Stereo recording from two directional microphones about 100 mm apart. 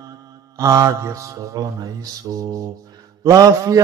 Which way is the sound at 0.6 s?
35° right (ahead or behind).